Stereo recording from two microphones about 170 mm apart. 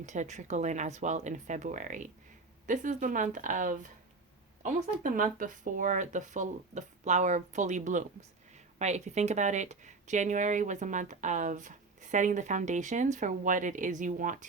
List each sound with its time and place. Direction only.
0.0 s speech: 45° right (ahead or behind)